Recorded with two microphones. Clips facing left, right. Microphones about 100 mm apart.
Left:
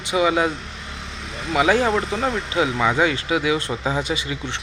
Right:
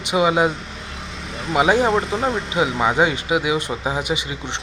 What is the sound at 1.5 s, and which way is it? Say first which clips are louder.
Speech: right 2 dB; 20° right (ahead or behind).